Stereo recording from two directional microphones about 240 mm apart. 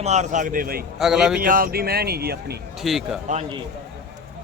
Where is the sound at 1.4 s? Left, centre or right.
Right.